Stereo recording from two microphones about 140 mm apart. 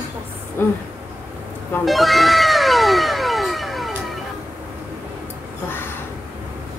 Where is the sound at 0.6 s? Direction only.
15° left (ahead or behind).